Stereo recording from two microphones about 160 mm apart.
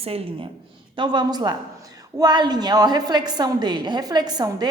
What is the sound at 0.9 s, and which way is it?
A woman's voice, 25° right (ahead or behind).